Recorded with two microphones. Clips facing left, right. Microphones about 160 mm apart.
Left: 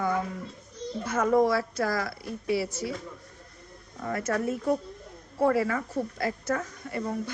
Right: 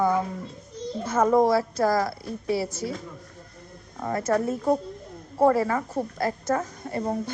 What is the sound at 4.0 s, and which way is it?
Speech, 40° right (ahead or behind).